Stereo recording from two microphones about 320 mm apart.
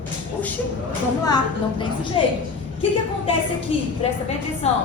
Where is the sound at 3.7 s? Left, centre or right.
Centre.